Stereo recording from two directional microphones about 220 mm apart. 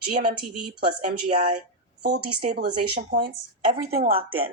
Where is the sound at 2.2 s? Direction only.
90° right.